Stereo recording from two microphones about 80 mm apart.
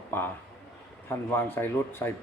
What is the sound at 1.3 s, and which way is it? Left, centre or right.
Speech, left.